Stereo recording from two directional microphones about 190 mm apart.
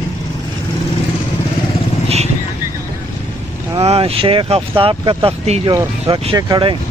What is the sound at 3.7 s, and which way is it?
Speech, 30° right (ahead or behind).